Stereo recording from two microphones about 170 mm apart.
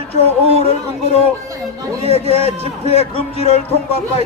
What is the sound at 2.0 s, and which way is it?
Speech, 35° right (ahead or behind).